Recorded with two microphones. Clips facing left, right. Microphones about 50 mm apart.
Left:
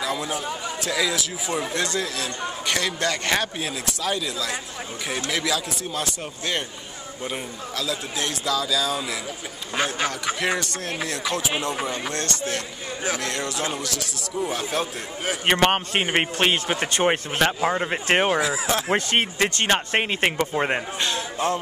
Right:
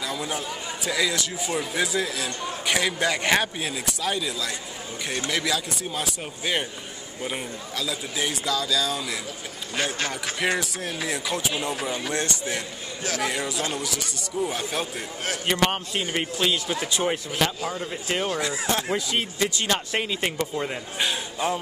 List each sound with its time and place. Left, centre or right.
0.0 s a sound: centre
0.8 s a man's voice: centre
9.9 s speech: centre
10.4 s a man's voice: centre
12.1 s a man's voice: centre
15.4 s a man's voice: left
18.4 s a man's voice: centre
18.9 s a man's voice: left
19.7 s a man's voice: left
21.0 s a man's voice: centre